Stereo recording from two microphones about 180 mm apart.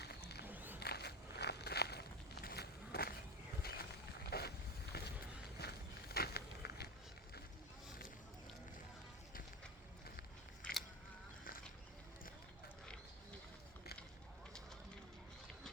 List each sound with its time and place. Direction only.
0.0 s music: 65° left (ahead or behind)
0.4 s a sound: 10° right (ahead or behind)
0.8 s walk: 65° left (ahead or behind)
3.6 s boat: 60° left (ahead or behind)
4.3 s a sound: 60° left (ahead or behind)
10.2 s biting: 55° left (ahead or behind)